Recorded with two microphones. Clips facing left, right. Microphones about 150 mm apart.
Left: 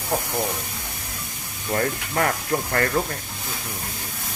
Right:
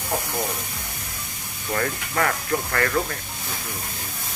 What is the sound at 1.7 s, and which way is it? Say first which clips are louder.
Speech: left 2 dB; 30° left (ahead or behind).